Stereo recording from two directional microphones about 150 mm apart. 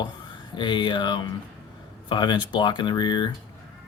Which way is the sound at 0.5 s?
30° left (ahead or behind).